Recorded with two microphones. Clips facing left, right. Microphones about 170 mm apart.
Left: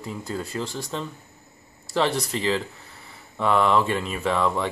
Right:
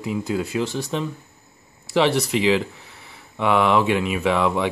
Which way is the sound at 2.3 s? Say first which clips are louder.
Right 6 dB; 15° right (ahead or behind).